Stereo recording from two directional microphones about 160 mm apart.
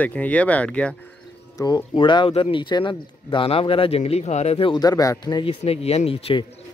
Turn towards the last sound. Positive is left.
turn(degrees=35)  # may be behind; listen again after turning